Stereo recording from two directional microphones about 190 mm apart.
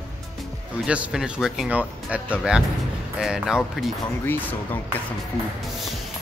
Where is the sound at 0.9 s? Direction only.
5° right (ahead or behind).